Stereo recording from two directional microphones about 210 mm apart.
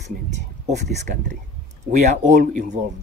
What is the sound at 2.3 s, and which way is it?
Speech, 40° right (ahead or behind).